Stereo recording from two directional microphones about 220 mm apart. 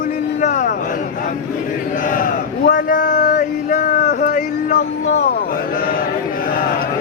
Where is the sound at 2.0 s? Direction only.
40° left (ahead or behind).